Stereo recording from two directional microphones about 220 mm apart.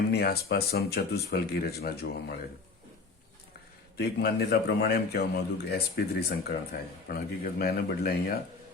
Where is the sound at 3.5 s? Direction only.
45° left (ahead or behind).